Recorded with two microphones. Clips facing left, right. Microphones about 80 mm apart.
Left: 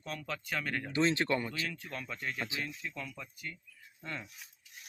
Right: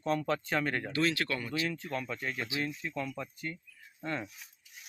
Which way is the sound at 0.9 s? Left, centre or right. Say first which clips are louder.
Left 4 dB; left.